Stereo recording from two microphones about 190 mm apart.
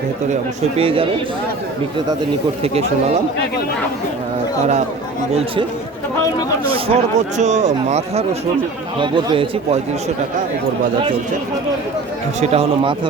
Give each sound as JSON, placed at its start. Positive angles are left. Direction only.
{"t": 0.8, "sound": "a man's voice", "side_deg": -30}
{"t": 6.7, "sound": "a man's voice", "side_deg": -30}
{"t": 12.4, "sound": "speech", "side_deg": -35}